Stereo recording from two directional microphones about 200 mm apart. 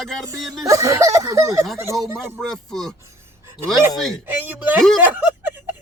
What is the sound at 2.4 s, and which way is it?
Speech, 5° left (ahead or behind).